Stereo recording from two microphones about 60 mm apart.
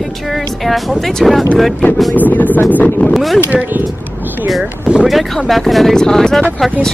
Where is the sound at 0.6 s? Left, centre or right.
Centre.